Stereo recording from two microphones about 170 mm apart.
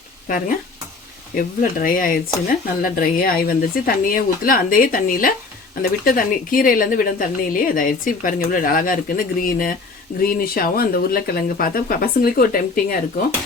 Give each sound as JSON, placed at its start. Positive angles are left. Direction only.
{"t": 0.3, "sound": "a woman's voice", "side_deg": 50}